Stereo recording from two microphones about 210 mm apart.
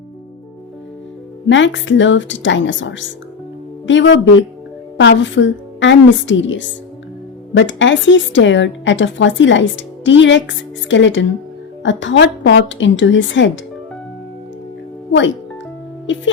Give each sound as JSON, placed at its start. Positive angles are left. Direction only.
{"t": 1.5, "sound": "speech", "side_deg": 60}
{"t": 16.1, "sound": "speech", "side_deg": 60}